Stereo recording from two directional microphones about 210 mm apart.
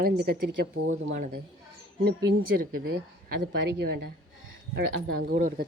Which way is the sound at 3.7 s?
55° right (ahead or behind).